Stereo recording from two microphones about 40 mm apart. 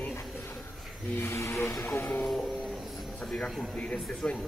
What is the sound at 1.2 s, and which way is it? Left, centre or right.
Speech, left.